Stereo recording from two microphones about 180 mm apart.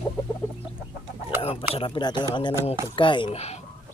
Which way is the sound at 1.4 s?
35° left (ahead or behind).